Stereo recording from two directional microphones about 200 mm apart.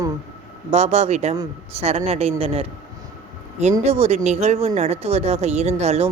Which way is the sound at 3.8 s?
30° right (ahead or behind).